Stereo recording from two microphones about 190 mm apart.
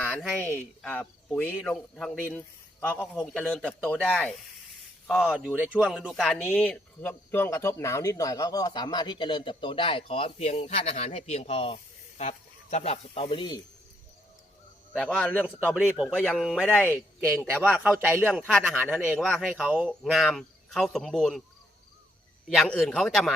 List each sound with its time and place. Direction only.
0.0 s speech: centre (ahead or behind)
3.3 s speech: 5° left (ahead or behind); by 13.6 s 25° left (ahead or behind)
14.9 s a man's voice: 5° left (ahead or behind)
15.7 s speech: 5° right (ahead or behind)
16.1 s speech: 5° left (ahead or behind)
16.6 s a man's voice: 10° left (ahead or behind)
17.2 s a man's voice: 10° right (ahead or behind)
22.4 s speech: 5° left (ahead or behind)